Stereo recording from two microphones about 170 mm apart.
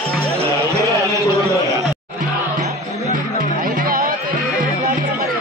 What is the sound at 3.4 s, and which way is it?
Music, 55° right (ahead or behind).